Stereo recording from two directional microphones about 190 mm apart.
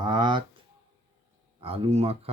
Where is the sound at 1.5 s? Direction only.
30° right (ahead or behind).